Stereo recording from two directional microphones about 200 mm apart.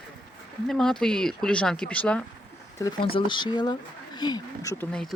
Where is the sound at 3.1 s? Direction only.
25° left (ahead or behind).